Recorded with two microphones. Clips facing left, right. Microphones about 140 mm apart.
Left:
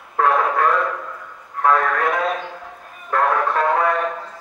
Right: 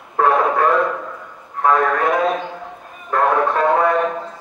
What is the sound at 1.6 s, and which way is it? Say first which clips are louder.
Radio: right 2 dB; centre (ahead or behind).